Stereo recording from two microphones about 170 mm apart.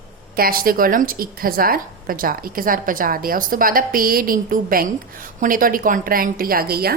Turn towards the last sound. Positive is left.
turn(degrees=-65)  # may be behind; listen again after turning